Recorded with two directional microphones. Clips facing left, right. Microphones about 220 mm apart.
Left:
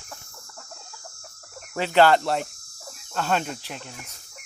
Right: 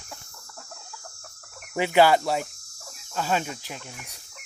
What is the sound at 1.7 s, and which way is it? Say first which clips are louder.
Cricket: left 1 dB; 15° right (ahead or behind).